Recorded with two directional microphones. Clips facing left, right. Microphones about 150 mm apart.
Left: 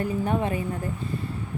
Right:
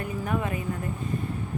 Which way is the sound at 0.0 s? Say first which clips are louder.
Left 4 dB; 30° left (ahead or behind).